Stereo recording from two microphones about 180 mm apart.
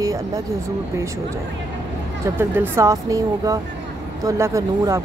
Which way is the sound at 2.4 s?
15° right (ahead or behind).